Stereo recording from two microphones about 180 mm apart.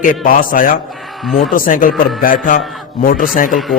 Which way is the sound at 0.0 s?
50° left (ahead or behind).